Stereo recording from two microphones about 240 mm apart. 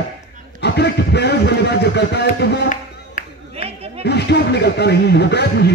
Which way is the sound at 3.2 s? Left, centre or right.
Left.